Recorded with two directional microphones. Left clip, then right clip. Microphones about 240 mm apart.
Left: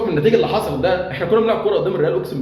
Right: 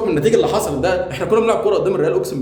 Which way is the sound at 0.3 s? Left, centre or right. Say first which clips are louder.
Even; centre.